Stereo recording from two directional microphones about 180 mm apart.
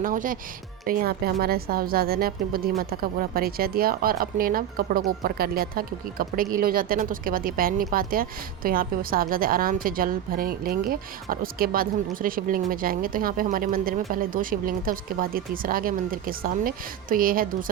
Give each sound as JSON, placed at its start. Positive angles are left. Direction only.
{"t": 0.0, "sound": "a woman's voice", "side_deg": -50}